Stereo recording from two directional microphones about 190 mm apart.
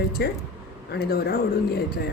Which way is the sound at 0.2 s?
60° left (ahead or behind).